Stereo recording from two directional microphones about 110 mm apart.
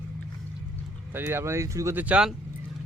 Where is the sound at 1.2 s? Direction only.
20° right (ahead or behind).